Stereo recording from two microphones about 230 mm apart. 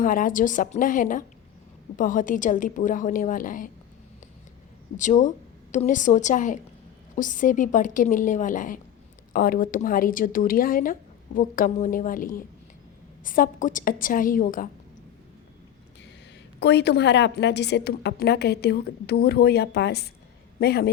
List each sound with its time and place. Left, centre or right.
0.0 s a woman's voice: left
4.9 s a woman's voice: left
16.6 s a woman's voice: left